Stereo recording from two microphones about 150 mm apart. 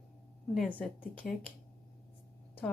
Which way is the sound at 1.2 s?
65° left (ahead or behind).